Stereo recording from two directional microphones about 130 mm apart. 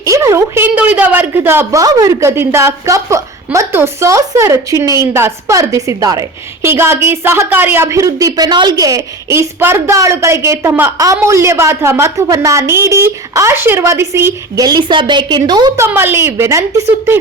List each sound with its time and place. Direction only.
0.0 s a woman's voice: 25° right (ahead or behind)
15.7 s a woman's voice: 20° right (ahead or behind)